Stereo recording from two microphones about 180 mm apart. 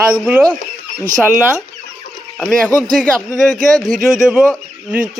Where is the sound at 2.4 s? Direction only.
Centre (ahead or behind).